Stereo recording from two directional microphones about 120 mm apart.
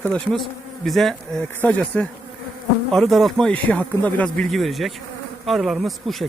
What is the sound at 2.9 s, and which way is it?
Speech, centre (ahead or behind).